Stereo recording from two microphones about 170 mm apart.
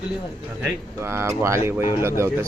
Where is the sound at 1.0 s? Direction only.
15° right (ahead or behind).